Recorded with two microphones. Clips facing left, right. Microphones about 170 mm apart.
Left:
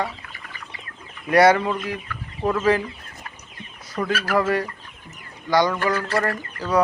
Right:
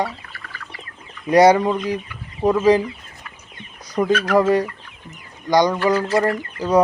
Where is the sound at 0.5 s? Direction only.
20° left (ahead or behind).